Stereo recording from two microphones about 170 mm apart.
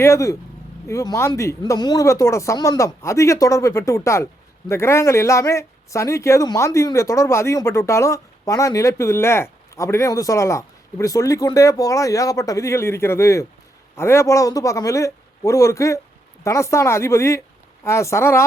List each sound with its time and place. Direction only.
0.0 s speech: 20° left (ahead or behind)